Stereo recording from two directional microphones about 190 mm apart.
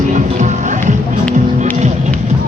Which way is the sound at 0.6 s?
40° right (ahead or behind).